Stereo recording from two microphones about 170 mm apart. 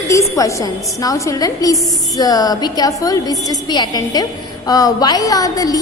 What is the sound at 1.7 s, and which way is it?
Speech, centre (ahead or behind).